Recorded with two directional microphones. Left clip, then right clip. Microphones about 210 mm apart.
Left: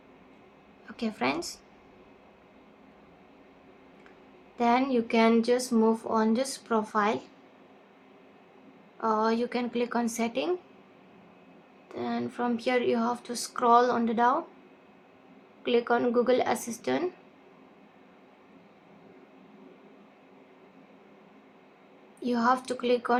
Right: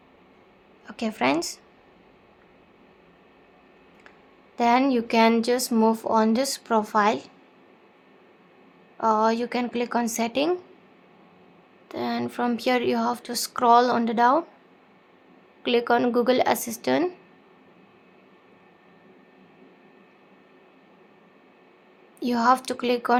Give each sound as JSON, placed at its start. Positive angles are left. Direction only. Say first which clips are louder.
{"t": 0.9, "sound": "speech", "louder": "right 6 dB", "side_deg": -40}
{"t": 4.5, "sound": "speech", "louder": "right 4 dB", "side_deg": -40}
{"t": 9.0, "sound": "speech", "louder": "right 5 dB", "side_deg": -40}
{"t": 11.9, "sound": "speech", "louder": "right 5 dB", "side_deg": -35}
{"t": 15.6, "sound": "speech", "louder": "right 4 dB", "side_deg": -40}
{"t": 22.2, "sound": "speech", "louder": "right 5 dB", "side_deg": -40}